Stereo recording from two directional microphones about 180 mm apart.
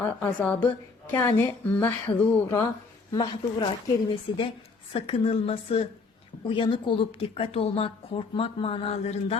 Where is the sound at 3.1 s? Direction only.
25° left (ahead or behind).